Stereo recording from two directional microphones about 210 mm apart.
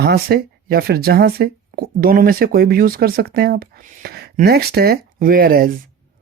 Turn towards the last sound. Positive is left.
turn(degrees=-45)  # may be behind; listen again after turning